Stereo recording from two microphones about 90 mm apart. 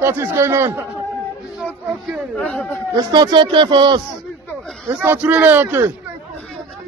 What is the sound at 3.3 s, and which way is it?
Speech, 65° right (ahead or behind).